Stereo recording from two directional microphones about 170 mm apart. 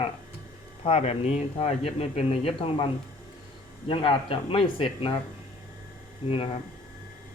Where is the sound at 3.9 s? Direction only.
30° left (ahead or behind).